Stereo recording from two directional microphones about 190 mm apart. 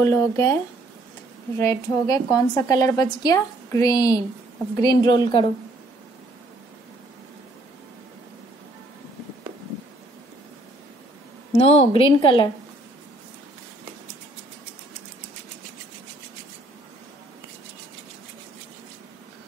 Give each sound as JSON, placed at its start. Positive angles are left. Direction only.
{"t": 0.0, "sound": "a woman's voice", "side_deg": 15}
{"t": 1.6, "sound": "a woman's voice", "side_deg": 15}
{"t": 11.5, "sound": "a woman's voice", "side_deg": 35}